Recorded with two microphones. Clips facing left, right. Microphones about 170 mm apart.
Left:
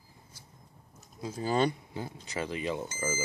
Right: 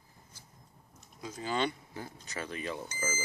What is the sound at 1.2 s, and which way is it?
Speech, 35° left (ahead or behind).